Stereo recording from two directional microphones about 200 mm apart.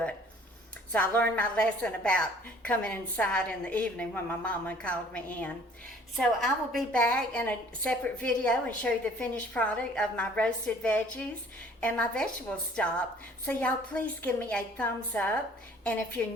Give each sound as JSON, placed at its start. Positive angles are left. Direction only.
{"t": 0.9, "sound": "a woman's voice", "side_deg": 10}